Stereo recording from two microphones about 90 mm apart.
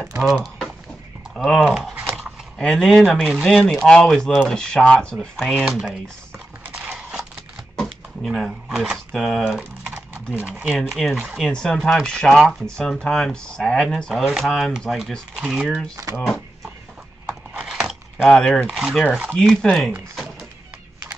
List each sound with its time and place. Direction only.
1.3 s speech: 5° left (ahead or behind)
5.1 s speech: centre (ahead or behind)
6.7 s a sound: 5° right (ahead or behind)
7.7 s a sound: 5° left (ahead or behind)
8.6 s speech: 5° right (ahead or behind)
9.6 s typing: 15° right (ahead or behind)
10.8 s speech: centre (ahead or behind)
16.1 s speech: 40° right (ahead or behind)
17.6 s keys jangling: 5° right (ahead or behind)
18.7 s speech: 5° right (ahead or behind)
19.3 s speech: 5° left (ahead or behind)